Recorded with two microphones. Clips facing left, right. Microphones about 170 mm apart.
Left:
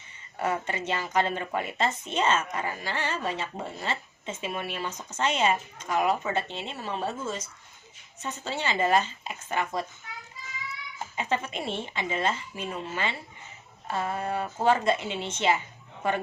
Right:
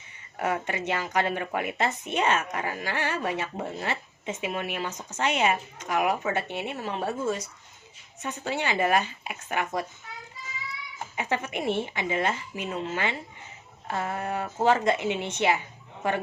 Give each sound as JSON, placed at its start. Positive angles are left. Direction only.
{"t": 0.3, "sound": "a woman's voice", "side_deg": -15}
{"t": 11.2, "sound": "a woman's voice", "side_deg": -20}